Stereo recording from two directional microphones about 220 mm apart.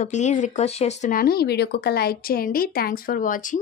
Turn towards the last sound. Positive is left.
turn(degrees=35)  # may be behind; listen again after turning